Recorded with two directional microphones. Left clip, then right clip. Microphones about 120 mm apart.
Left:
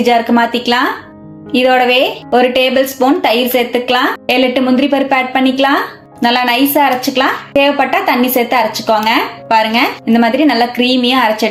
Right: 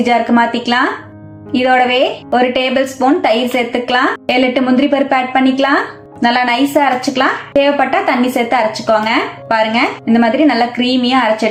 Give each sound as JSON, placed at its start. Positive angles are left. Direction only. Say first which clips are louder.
{"t": 0.0, "sound": "a woman's voice", "louder": "left 1 dB", "side_deg": 20}